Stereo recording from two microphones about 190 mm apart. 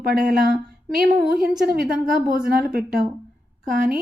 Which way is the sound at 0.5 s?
55° right (ahead or behind).